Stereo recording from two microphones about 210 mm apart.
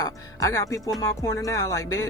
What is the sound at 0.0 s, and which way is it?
Speech, 15° left (ahead or behind).